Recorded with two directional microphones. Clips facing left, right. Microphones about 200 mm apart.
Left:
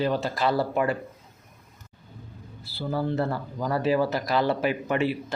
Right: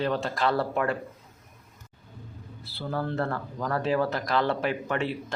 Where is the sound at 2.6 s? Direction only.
Centre (ahead or behind).